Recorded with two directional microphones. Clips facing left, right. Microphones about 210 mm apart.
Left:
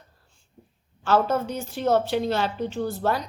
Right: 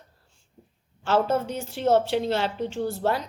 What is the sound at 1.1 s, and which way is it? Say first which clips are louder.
A woman's voice: left 1 dB; 25° right (ahead or behind).